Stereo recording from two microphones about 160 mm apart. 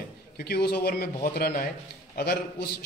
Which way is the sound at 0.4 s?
85° left.